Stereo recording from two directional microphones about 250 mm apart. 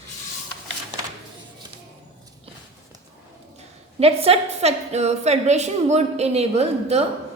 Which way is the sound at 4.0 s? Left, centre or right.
Right.